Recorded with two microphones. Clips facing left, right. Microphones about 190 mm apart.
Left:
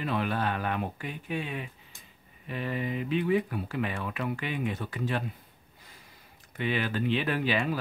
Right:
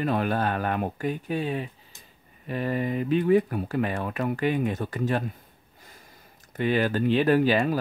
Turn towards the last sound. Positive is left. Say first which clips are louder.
# right 7 dB
turn(degrees=-40)  # may be behind; listen again after turning